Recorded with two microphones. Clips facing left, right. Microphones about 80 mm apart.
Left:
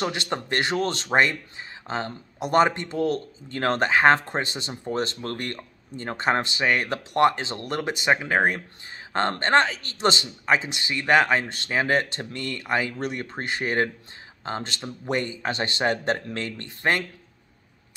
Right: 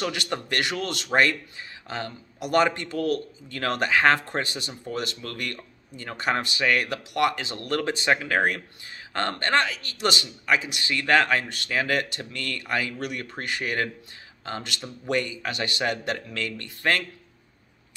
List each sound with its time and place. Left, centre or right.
0.0 s a man's voice: left